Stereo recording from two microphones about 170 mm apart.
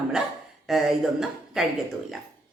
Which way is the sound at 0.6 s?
Centre (ahead or behind).